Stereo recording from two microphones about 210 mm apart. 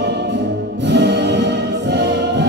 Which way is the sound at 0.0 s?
55° right (ahead or behind).